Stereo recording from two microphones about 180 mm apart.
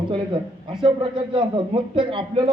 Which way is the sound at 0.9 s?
25° right (ahead or behind).